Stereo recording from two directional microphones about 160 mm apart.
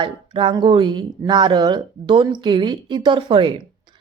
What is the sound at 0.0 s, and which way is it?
Speech, 30° right (ahead or behind).